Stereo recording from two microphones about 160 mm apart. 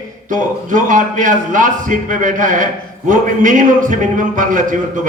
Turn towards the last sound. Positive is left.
turn(degrees=-55)  # may be behind; listen again after turning